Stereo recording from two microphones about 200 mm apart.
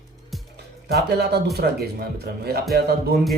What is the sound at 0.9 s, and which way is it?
Speech, 55° right (ahead or behind).